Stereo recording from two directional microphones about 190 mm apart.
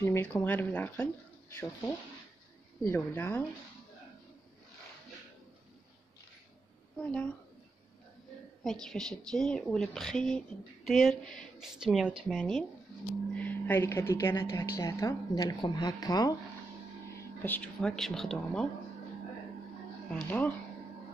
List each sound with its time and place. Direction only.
0.0 s a woman's voice: 10° left (ahead or behind)
2.8 s a woman's voice: 10° left (ahead or behind)
7.0 s a woman's voice: 10° left (ahead or behind)
8.6 s a woman's voice: centre (ahead or behind); by 16.3 s 20° left (ahead or behind)
17.4 s a woman's voice: 10° left (ahead or behind)
20.1 s a woman's voice: 5° left (ahead or behind)